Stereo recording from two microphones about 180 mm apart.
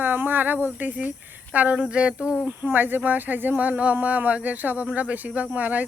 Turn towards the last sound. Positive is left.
turn(degrees=-10)  # may be behind; listen again after turning